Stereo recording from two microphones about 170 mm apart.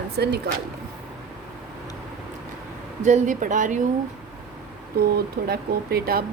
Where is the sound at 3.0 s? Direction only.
45° right (ahead or behind).